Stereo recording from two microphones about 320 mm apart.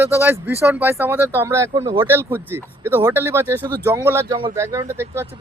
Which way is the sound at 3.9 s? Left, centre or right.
Centre.